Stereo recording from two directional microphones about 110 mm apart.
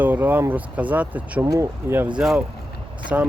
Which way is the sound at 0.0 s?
15° right (ahead or behind).